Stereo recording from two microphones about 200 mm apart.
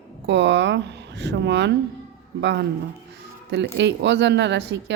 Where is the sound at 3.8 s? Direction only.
60° right (ahead or behind).